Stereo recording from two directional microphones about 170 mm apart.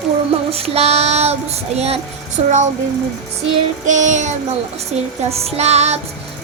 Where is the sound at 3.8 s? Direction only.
45° right (ahead or behind).